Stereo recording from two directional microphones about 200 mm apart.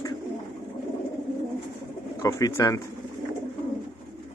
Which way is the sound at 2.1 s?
15° left (ahead or behind).